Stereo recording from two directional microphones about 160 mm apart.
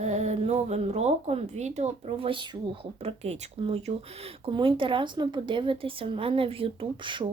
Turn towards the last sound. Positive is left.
turn(degrees=-30)  # may be behind; listen again after turning